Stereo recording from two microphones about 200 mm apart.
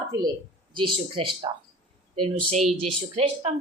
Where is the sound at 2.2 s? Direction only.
35° right (ahead or behind).